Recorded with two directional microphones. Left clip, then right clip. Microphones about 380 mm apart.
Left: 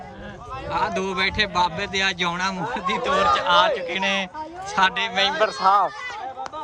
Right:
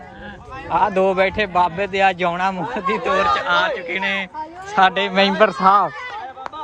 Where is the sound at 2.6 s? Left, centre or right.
Right.